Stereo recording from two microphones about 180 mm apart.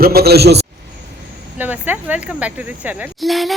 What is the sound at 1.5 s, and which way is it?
Speech, 10° right (ahead or behind).